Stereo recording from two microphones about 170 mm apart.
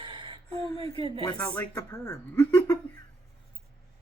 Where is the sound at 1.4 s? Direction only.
10° left (ahead or behind).